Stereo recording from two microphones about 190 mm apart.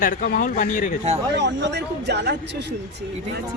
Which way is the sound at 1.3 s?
65° right (ahead or behind).